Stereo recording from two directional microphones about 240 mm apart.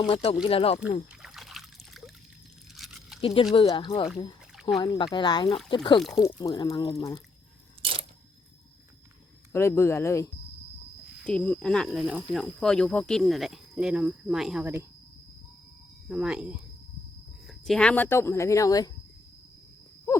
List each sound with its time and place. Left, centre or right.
0.0 s speech: left
1.2 s trickle: centre
2.7 s a sound: centre
3.2 s speech: left
7.8 s a sound: right
9.5 s speech: centre
16.0 s speech: centre
17.7 s speech: centre